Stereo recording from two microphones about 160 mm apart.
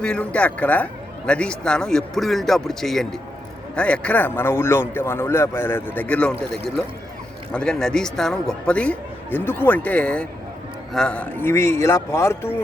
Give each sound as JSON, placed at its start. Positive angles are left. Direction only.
{"t": 0.0, "sound": "speech", "side_deg": 5}